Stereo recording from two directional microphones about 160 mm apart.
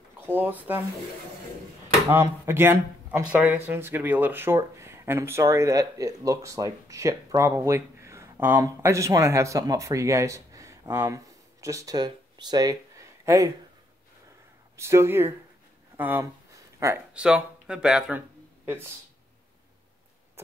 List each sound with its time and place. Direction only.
0.3 s speech: 10° right (ahead or behind)
2.0 s speech: 15° right (ahead or behind)
14.8 s speech: 15° right (ahead or behind)
16.0 s a sound: 15° right (ahead or behind)
17.1 s speech: 5° right (ahead or behind)
20.4 s vehicle: 15° right (ahead or behind)